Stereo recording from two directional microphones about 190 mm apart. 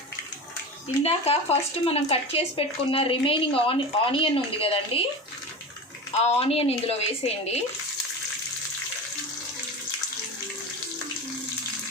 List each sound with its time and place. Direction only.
1.0 s speech: 35° left (ahead or behind)
6.2 s a woman's voice: 30° left (ahead or behind)